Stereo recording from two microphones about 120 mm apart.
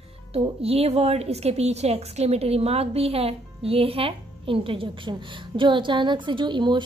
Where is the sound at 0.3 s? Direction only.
55° right (ahead or behind).